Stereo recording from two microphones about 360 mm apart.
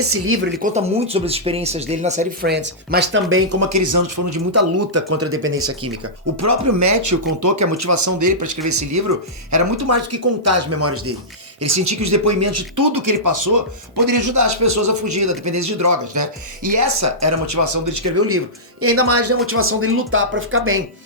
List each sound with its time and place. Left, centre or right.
0.6 s speech: centre; by 5.9 s right
6.4 s speech: right